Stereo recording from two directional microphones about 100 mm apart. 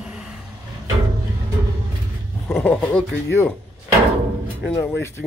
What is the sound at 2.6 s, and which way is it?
Speech, 15° left (ahead or behind).